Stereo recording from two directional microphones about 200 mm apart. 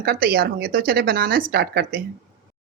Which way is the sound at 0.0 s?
50° right (ahead or behind).